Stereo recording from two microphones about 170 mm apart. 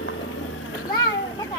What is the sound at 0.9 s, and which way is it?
Children playing, 25° left (ahead or behind).